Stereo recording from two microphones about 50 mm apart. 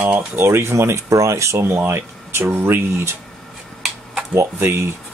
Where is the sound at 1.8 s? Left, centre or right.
Right.